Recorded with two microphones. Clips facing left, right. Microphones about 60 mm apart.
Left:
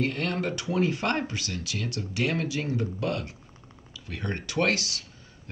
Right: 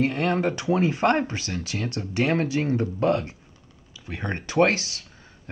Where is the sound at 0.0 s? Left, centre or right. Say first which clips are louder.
Right 5 dB; right.